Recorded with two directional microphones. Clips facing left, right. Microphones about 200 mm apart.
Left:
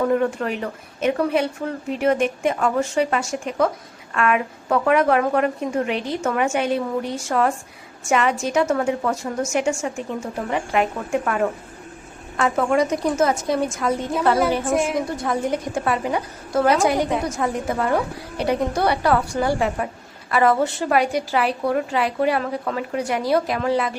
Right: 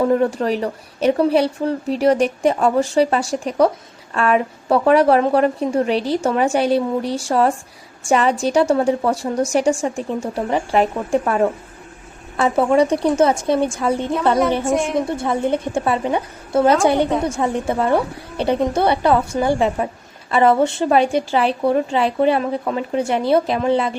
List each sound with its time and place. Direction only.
0.0 s speech: 35° right (ahead or behind)
14.6 s a woman's voice: centre (ahead or behind)
14.9 s a woman's voice: 25° right (ahead or behind)